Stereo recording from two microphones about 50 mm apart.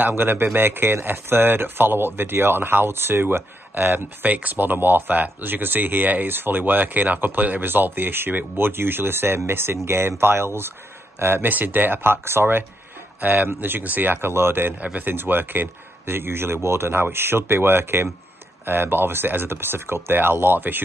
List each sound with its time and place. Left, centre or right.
0.1 s speech: right
11.4 s speech: right
13.2 s speech: right
14.8 s speech: right
15.0 s speech: right